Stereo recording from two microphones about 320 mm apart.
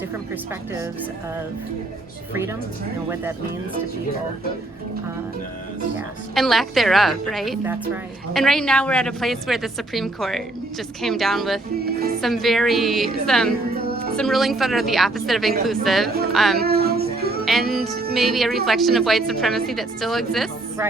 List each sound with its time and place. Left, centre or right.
2.3 s a woman's voice: centre
6.3 s a woman's voice: centre
16.6 s child singing: right
17.4 s a woman's voice: centre